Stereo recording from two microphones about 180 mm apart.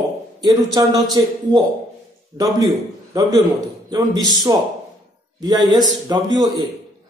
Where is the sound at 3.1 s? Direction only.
20° right (ahead or behind).